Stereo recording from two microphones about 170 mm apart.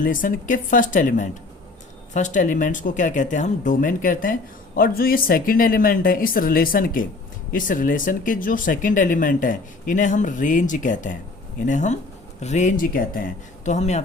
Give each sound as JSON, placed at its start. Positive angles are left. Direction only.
{"t": 0.0, "sound": "speech", "side_deg": 50}